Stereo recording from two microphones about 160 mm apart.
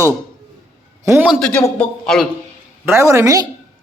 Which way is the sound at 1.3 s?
5° left (ahead or behind).